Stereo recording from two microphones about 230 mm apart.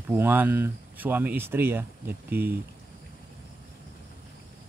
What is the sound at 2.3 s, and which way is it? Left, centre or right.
Speech, right.